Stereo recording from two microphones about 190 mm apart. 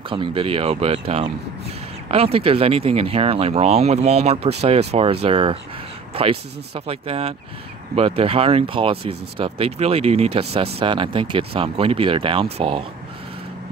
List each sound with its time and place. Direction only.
0.1 s speech: 25° right (ahead or behind)